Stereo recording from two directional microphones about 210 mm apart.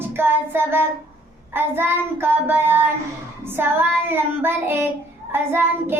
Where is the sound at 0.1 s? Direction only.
10° right (ahead or behind).